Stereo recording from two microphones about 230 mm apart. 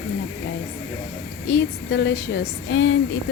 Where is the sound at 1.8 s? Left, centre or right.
Left.